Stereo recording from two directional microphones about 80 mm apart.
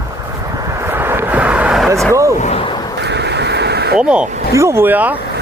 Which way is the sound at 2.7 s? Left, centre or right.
Left.